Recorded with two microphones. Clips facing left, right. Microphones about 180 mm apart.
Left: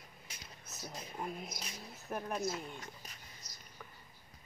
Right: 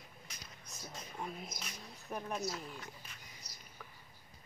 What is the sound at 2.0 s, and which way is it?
Speech, centre (ahead or behind).